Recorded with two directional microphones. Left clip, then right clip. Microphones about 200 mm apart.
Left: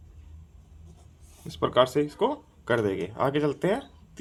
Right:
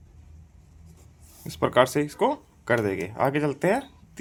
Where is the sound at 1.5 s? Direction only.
25° right (ahead or behind).